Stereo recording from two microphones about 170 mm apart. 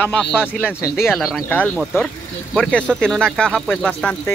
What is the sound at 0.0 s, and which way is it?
Speech, 10° left (ahead or behind).